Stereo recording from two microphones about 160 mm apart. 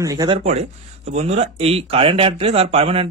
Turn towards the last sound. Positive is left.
turn(degrees=-40)  # may be behind; listen again after turning